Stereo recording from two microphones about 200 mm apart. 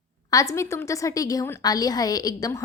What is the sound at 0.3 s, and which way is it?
A woman's voice, 15° left (ahead or behind).